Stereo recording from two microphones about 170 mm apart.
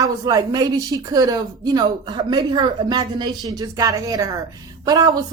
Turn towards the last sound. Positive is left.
turn(degrees=-25)  # may be behind; listen again after turning